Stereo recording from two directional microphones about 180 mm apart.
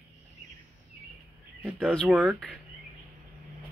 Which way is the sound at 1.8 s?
5° left (ahead or behind).